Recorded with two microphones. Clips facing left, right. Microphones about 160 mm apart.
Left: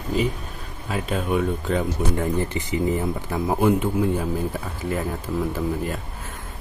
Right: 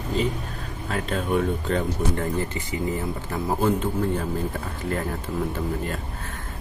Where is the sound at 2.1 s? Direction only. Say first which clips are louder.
Left 3 dB; 15° left (ahead or behind).